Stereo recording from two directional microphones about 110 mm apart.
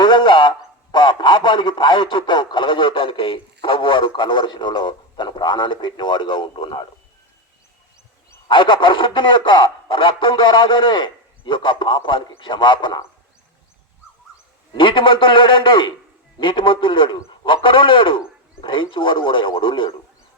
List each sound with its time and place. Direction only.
0.0 s a man's voice: 45° left (ahead or behind)
8.4 s a man's voice: 45° left (ahead or behind)
14.8 s a man's voice: 50° left (ahead or behind)